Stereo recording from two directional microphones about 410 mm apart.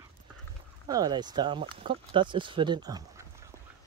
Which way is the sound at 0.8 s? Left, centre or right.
Centre.